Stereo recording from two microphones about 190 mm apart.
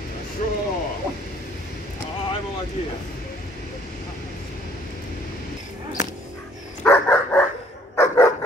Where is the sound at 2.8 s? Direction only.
35° left (ahead or behind).